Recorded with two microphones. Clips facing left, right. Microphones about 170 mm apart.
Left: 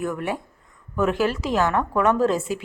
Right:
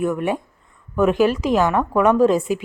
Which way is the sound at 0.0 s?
20° right (ahead or behind).